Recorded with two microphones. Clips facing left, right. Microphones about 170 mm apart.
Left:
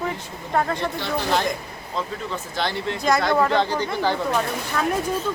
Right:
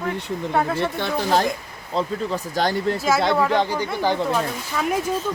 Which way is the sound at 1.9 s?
40° right (ahead or behind).